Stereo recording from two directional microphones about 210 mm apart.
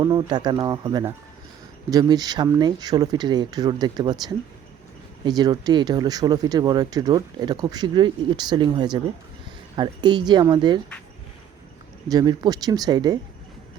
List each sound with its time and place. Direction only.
0.0 s speech: 20° right (ahead or behind)
12.0 s speech: 20° right (ahead or behind)